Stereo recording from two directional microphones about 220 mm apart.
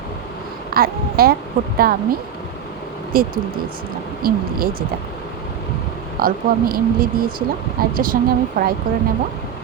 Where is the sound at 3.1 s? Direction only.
40° right (ahead or behind).